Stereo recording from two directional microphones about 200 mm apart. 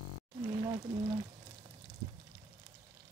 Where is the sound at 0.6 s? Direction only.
20° right (ahead or behind).